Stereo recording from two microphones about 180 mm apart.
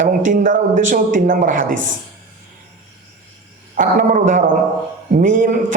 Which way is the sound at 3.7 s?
45° right (ahead or behind).